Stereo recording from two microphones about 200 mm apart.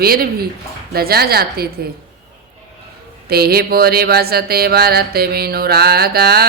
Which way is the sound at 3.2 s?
50° right (ahead or behind).